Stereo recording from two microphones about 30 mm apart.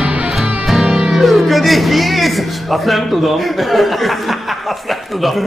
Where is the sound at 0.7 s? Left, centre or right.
Centre.